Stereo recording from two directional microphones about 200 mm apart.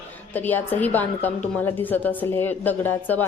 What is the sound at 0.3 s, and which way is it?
A woman's voice, 10° left (ahead or behind).